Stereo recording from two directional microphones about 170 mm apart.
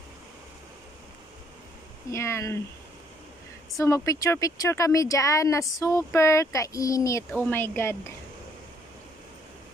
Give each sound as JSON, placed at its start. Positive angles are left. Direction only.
{"t": 2.0, "sound": "speech", "side_deg": 15}
{"t": 3.7, "sound": "speech", "side_deg": 20}